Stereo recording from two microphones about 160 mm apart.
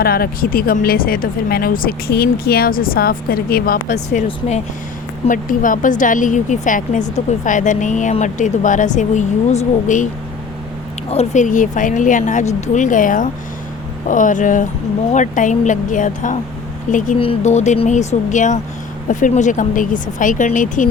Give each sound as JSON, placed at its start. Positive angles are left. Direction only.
{"t": 0.0, "sound": "speech", "side_deg": 70}
{"t": 4.3, "sound": "speech", "side_deg": 45}
{"t": 5.3, "sound": "speech", "side_deg": 55}
{"t": 11.1, "sound": "speech", "side_deg": 45}
{"t": 17.2, "sound": "speech", "side_deg": 40}